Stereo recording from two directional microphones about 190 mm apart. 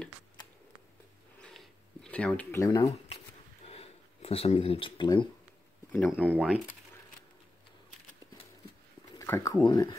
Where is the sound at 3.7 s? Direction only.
30° left (ahead or behind).